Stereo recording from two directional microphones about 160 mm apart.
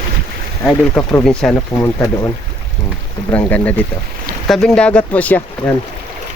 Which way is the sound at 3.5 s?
10° left (ahead or behind).